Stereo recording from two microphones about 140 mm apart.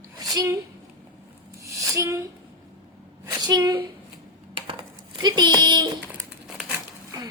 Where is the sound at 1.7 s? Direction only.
20° right (ahead or behind).